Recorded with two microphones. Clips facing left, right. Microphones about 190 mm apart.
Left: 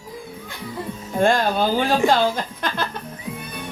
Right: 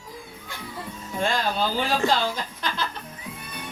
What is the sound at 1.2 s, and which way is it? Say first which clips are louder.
Speech: left 7 dB; 50° left (ahead or behind).